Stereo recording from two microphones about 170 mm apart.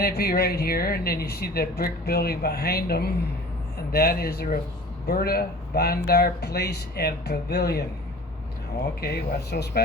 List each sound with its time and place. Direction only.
0.0 s speech: 60° left (ahead or behind)
9.0 s speech: 70° left (ahead or behind)